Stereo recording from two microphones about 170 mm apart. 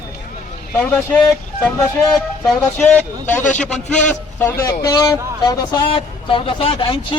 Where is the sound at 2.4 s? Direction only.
10° left (ahead or behind).